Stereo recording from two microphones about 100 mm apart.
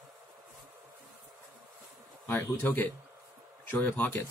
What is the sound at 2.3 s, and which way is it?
A man's voice, 20° left (ahead or behind).